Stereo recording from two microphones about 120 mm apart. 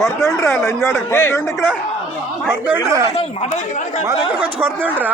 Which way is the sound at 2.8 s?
30° right (ahead or behind).